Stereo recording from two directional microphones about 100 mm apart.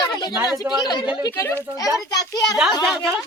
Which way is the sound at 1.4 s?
25° left (ahead or behind).